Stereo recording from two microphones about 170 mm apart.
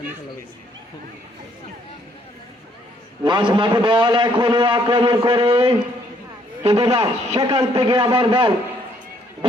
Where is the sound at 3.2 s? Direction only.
30° right (ahead or behind).